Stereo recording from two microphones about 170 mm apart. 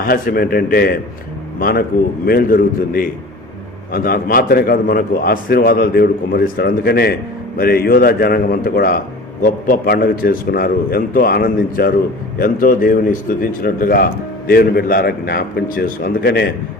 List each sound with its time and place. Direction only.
0.0 s a man's voice: 60° left (ahead or behind)